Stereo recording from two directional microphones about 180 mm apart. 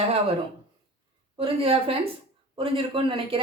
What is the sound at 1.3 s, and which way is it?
A woman's voice, 30° right (ahead or behind).